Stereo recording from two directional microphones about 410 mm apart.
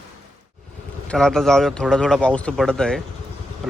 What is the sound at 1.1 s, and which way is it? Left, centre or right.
A man's voice, centre.